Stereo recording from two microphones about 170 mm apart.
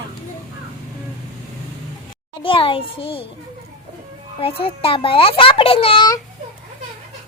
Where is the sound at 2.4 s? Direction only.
30° left (ahead or behind).